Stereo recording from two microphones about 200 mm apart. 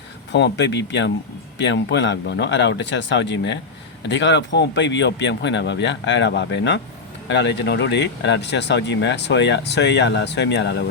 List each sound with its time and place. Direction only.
0.3 s speech: 60° left (ahead or behind)